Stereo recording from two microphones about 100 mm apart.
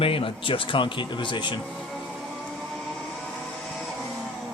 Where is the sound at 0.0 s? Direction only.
65° left (ahead or behind).